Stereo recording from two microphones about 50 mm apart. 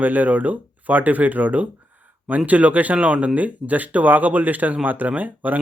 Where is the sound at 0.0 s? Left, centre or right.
Right.